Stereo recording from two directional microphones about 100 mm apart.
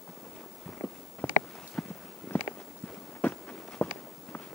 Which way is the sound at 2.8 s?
15° left (ahead or behind).